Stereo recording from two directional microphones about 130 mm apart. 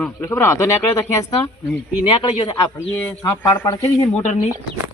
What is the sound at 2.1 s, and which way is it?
Speech, 40° left (ahead or behind).